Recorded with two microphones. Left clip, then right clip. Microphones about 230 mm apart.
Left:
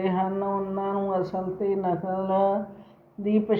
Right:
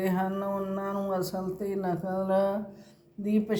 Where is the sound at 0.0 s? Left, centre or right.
Right.